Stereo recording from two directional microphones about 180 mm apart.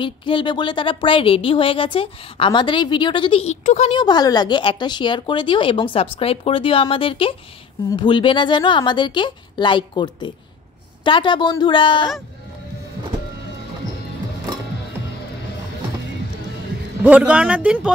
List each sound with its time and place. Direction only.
0.0 s speech: 25° left (ahead or behind)
4.0 s speech: 25° left (ahead or behind)
17.0 s speech: 5° right (ahead or behind)